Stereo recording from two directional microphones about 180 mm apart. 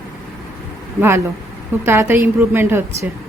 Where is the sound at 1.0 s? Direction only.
15° right (ahead or behind).